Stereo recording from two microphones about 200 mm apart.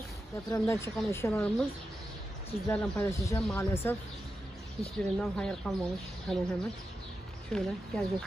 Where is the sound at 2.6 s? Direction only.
10° left (ahead or behind).